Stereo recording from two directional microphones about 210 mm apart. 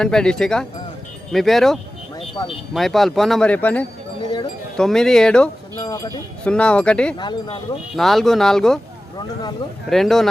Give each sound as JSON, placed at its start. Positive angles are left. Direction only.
{"t": 0.0, "sound": "speech", "side_deg": 5}
{"t": 2.1, "sound": "a sound", "side_deg": 25}
{"t": 2.7, "sound": "speech", "side_deg": 0}
{"t": 5.7, "sound": "speech", "side_deg": 15}
{"t": 6.4, "sound": "speech", "side_deg": 5}
{"t": 7.2, "sound": "speech", "side_deg": 20}
{"t": 7.9, "sound": "speech", "side_deg": 0}
{"t": 9.1, "sound": "speech", "side_deg": 20}
{"t": 9.9, "sound": "speech", "side_deg": 0}